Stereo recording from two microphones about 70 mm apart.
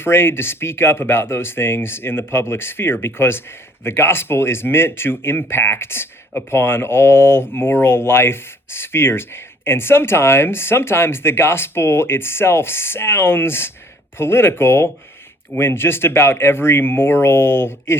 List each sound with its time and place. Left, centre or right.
0.0 s speech: left